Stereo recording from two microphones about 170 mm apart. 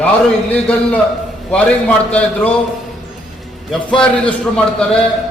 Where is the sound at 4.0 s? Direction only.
5° left (ahead or behind).